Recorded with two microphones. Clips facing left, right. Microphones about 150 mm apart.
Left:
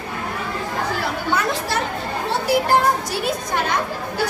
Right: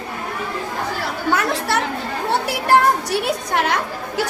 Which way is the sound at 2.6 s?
65° right (ahead or behind).